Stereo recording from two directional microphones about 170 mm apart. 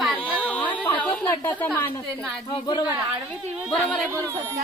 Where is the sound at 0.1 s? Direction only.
10° left (ahead or behind).